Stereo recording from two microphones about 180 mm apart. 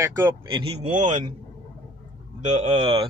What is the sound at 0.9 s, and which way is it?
Speech, 45° right (ahead or behind).